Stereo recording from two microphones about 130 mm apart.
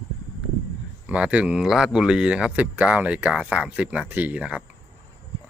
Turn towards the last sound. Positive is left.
turn(degrees=-10)  # may be behind; listen again after turning